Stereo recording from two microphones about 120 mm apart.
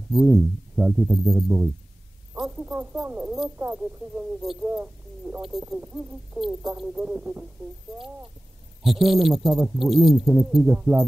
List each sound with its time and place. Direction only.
0.1 s speech: centre (ahead or behind)
2.3 s a sound: 5° right (ahead or behind)
2.6 s speech: 15° right (ahead or behind)
4.4 s speech: centre (ahead or behind)
5.8 s speech: 15° right (ahead or behind)
8.8 s speech: centre (ahead or behind)
10.7 s music: 20° right (ahead or behind)